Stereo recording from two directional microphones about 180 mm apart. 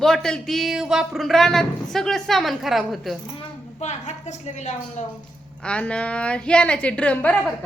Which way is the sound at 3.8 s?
40° left (ahead or behind).